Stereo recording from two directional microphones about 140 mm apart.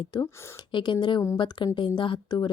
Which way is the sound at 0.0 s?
30° left (ahead or behind).